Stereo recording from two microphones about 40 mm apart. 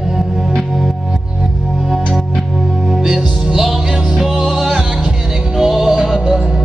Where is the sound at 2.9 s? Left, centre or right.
Centre.